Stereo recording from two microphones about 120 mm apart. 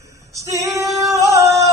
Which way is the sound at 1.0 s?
25° right (ahead or behind).